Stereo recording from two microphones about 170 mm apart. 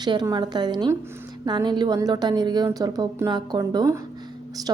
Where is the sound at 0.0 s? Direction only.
25° right (ahead or behind).